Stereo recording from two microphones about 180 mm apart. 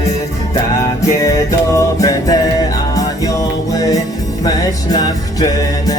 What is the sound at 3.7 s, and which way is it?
Music, 20° left (ahead or behind).